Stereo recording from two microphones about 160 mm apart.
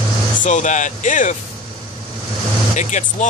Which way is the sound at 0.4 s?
50° left (ahead or behind).